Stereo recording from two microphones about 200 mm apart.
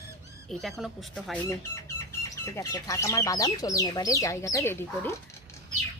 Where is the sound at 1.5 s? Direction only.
15° left (ahead or behind).